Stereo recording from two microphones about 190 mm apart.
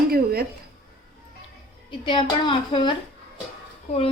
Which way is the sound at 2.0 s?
25° left (ahead or behind).